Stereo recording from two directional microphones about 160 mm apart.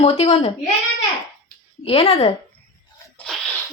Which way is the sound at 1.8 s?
40° left (ahead or behind).